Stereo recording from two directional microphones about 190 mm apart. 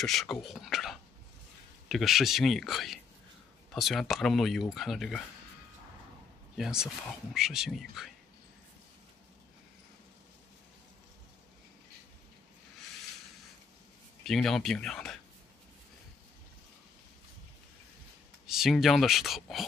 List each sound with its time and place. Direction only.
0.0 s speech: centre (ahead or behind)
6.5 s speech: centre (ahead or behind)
14.2 s speech: centre (ahead or behind)
18.5 s speech: centre (ahead or behind)